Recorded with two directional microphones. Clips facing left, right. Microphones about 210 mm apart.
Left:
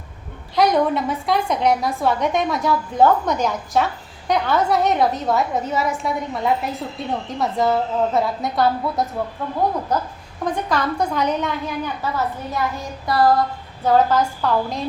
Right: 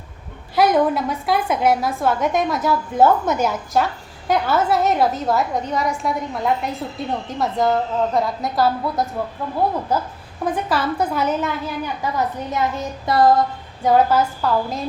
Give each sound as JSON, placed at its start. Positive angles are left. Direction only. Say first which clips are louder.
{"t": 0.5, "sound": "a woman's voice", "louder": "right 1 dB", "side_deg": -5}
{"t": 12.0, "sound": "a woman's voice", "louder": "right 4 dB", "side_deg": -15}
{"t": 13.8, "sound": "a woman's voice", "louder": "right 1 dB", "side_deg": -10}